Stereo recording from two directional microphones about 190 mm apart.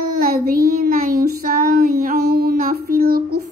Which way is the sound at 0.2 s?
50° right (ahead or behind).